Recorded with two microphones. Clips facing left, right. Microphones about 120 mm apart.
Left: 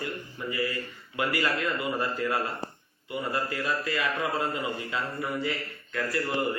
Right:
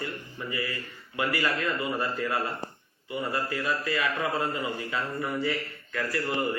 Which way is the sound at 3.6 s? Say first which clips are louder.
Right 1 dB; 25° right (ahead or behind).